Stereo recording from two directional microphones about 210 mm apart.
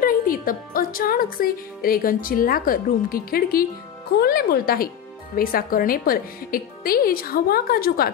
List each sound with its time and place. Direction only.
0.0 s speech: 40° left (ahead or behind)